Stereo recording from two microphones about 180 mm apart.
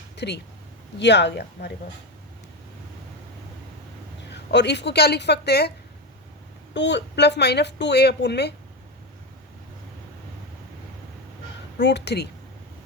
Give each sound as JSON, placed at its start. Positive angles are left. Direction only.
{"t": 0.2, "sound": "a woman's voice", "side_deg": 70}
{"t": 4.3, "sound": "a woman's voice", "side_deg": 70}
{"t": 6.7, "sound": "a woman's voice", "side_deg": 80}
{"t": 11.8, "sound": "a woman's voice", "side_deg": 70}